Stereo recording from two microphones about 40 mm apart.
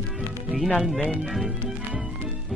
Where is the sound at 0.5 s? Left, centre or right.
Centre.